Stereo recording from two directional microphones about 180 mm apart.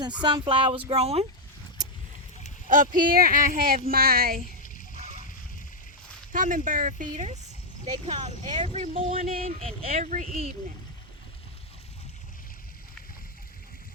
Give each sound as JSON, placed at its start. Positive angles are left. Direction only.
{"t": 0.2, "sound": "speech", "side_deg": -25}
{"t": 2.6, "sound": "speech", "side_deg": -50}
{"t": 4.9, "sound": "a sound", "side_deg": -45}
{"t": 6.3, "sound": "speech", "side_deg": -45}